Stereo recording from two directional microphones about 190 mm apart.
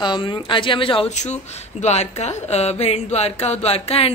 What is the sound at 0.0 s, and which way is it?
Speech, 25° left (ahead or behind).